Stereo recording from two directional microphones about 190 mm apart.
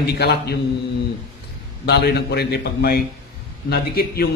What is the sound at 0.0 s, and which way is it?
Speech, 60° left (ahead or behind).